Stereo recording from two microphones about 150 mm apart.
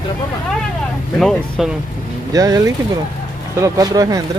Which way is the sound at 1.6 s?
Centre (ahead or behind).